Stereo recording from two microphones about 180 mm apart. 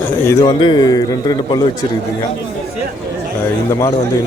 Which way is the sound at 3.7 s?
20° left (ahead or behind).